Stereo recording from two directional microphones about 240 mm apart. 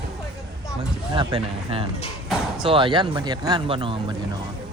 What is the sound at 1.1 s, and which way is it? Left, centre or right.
Speech, right.